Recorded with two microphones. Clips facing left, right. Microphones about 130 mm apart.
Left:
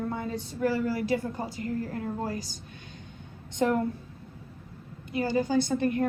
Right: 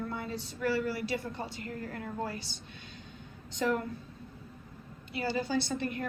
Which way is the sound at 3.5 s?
50° left (ahead or behind).